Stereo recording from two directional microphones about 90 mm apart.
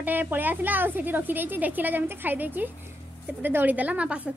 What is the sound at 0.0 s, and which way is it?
A woman's voice, 20° right (ahead or behind).